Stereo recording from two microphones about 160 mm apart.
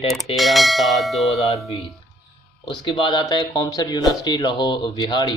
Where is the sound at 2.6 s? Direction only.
30° left (ahead or behind).